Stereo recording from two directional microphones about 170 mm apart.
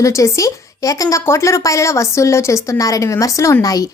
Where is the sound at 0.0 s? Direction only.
20° left (ahead or behind).